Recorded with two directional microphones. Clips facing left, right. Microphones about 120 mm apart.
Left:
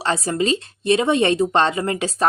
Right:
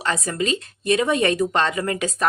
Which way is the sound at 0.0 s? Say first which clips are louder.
Left 3 dB; 30° left (ahead or behind).